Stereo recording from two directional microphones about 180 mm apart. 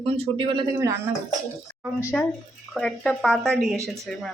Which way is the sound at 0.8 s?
15° right (ahead or behind).